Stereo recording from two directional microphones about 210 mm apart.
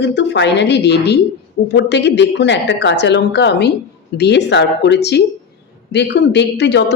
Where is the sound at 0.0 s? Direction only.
55° left (ahead or behind).